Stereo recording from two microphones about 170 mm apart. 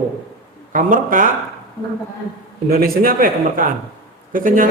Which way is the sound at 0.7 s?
50° right (ahead or behind).